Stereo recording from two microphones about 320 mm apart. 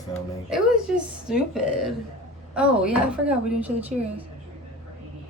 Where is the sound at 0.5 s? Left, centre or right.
Centre.